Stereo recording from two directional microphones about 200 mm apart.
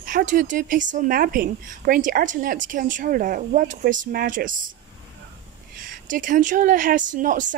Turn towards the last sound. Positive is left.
turn(degrees=-40)  # may be behind; listen again after turning